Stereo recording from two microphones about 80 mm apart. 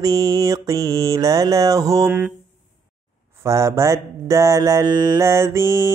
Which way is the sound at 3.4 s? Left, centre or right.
Right.